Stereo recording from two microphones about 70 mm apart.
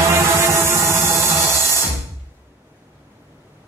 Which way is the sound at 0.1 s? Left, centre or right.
Right.